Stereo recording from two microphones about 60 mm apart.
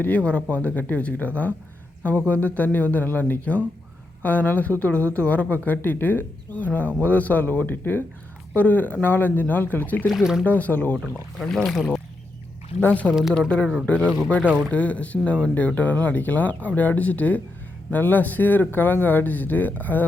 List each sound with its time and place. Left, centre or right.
0.0 s speech: left
11.0 s speech: centre
12.8 s speech: left